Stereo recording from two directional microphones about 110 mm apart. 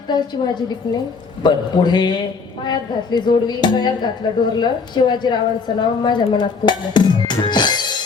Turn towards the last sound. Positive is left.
turn(degrees=40)  # may be behind; listen again after turning